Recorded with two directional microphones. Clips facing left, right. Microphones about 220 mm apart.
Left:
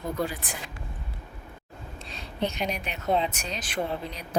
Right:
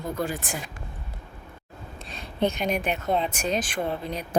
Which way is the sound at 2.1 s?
50° right (ahead or behind).